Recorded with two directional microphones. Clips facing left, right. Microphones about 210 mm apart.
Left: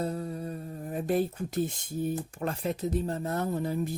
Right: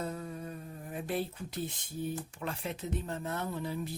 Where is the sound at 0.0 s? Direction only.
35° left (ahead or behind).